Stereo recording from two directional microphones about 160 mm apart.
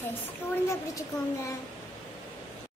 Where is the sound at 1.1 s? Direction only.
25° left (ahead or behind).